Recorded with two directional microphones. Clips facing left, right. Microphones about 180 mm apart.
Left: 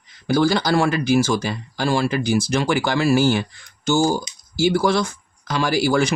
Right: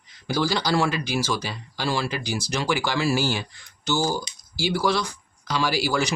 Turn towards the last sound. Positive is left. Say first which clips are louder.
# left 5 dB
turn(degrees=50)  # may be behind; listen again after turning